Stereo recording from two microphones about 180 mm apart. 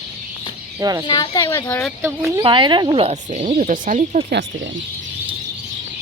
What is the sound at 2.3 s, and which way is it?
Speech, 25° right (ahead or behind).